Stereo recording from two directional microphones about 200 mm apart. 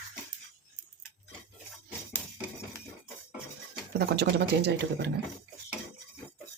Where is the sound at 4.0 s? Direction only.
55° right (ahead or behind).